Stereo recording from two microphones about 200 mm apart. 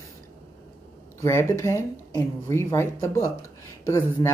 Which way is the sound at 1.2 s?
15° left (ahead or behind).